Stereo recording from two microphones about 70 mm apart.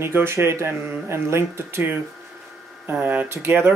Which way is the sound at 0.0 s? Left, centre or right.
Right.